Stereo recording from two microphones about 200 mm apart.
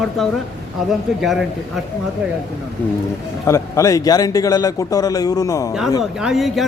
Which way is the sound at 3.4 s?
15° left (ahead or behind).